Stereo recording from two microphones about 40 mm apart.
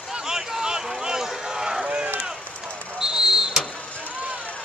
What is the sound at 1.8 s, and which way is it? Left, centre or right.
Run, right.